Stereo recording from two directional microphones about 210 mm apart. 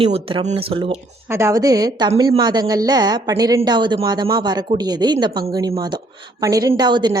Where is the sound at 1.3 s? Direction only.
15° right (ahead or behind).